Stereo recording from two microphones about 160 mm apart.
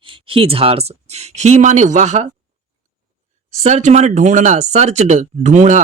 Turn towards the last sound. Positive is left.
turn(degrees=-45)  # may be behind; listen again after turning